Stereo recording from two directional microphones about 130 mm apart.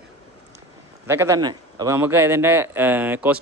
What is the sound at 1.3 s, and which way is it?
Speech, 30° right (ahead or behind).